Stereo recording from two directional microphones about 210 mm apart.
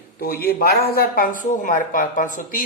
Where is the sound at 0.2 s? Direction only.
45° left (ahead or behind).